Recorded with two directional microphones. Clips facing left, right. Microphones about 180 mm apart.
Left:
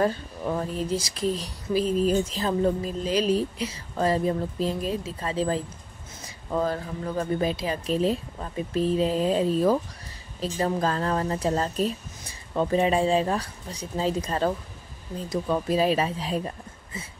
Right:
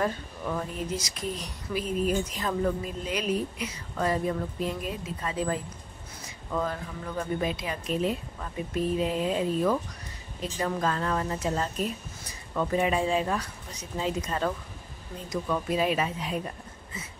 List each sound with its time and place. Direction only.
0.0 s speech: 35° left (ahead or behind)